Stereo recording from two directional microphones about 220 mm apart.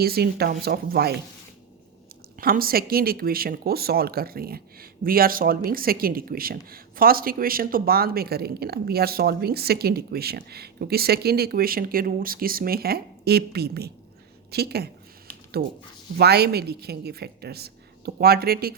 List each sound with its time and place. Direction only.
0.0 s speech: 45° right (ahead or behind)
2.4 s speech: 40° right (ahead or behind)